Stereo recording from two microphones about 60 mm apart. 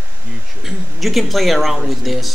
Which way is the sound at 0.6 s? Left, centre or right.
Centre.